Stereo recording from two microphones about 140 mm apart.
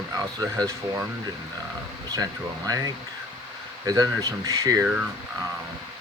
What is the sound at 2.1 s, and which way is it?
Speech, 25° right (ahead or behind).